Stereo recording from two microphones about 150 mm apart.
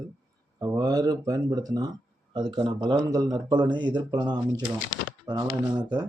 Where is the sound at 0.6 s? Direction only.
25° right (ahead or behind).